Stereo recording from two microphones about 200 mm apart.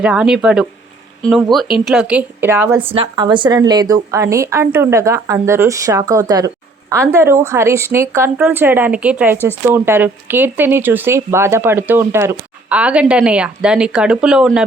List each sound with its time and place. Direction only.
0.0 s speech: 5° right (ahead or behind)
2.9 s speech: 25° right (ahead or behind); by 14.6 s 5° right (ahead or behind)